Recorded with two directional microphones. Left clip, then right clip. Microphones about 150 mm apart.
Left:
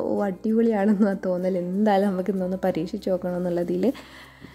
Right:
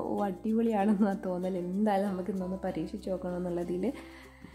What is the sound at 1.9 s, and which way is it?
A woman's voice, 50° left (ahead or behind).